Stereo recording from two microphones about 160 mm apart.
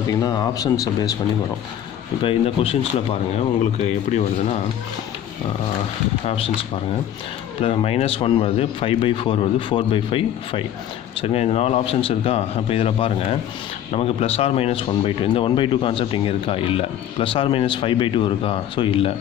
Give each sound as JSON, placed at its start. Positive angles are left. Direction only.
{"t": 0.1, "sound": "speech", "side_deg": 25}
{"t": 2.2, "sound": "speech", "side_deg": 35}
{"t": 6.2, "sound": "speech", "side_deg": 35}
{"t": 7.6, "sound": "speech", "side_deg": 40}